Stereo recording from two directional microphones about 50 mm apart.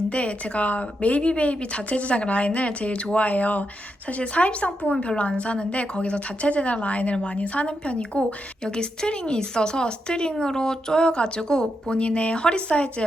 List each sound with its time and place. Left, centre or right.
0.1 s a woman's voice: left